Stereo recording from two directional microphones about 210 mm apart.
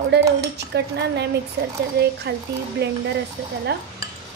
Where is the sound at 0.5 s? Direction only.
50° right (ahead or behind).